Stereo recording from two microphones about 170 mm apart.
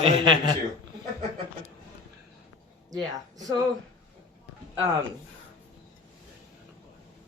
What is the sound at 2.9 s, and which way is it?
Speech, 20° right (ahead or behind).